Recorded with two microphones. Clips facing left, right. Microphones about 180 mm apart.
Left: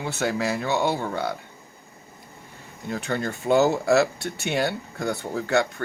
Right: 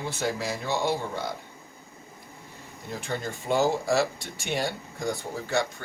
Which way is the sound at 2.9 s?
65° left (ahead or behind).